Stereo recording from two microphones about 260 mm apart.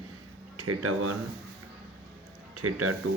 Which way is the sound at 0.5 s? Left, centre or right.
Right.